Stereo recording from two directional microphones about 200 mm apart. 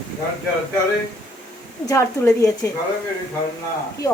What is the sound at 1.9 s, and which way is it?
Speech, 15° left (ahead or behind).